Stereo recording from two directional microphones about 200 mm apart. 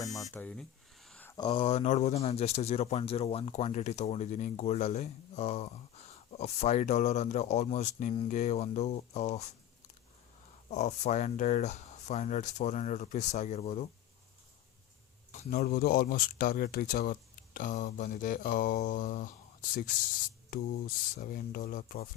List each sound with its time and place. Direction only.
0.0 s a sound: 15° left (ahead or behind)
0.3 s speech: 5° left (ahead or behind)
1.0 s a sound: 5° left (ahead or behind)
1.4 s speech: 25° left (ahead or behind)
10.7 s speech: 35° left (ahead or behind)
15.4 s speech: 45° left (ahead or behind)
20.5 s speech: 45° left (ahead or behind)